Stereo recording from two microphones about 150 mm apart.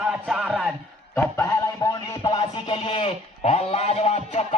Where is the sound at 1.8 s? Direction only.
25° left (ahead or behind).